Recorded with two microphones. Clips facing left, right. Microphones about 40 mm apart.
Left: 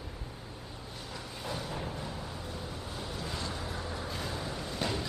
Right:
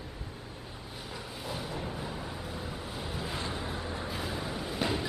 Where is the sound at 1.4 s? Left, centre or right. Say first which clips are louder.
Even; centre.